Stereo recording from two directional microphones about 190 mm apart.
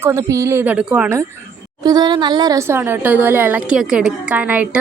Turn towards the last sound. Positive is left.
turn(degrees=-5)  # may be behind; listen again after turning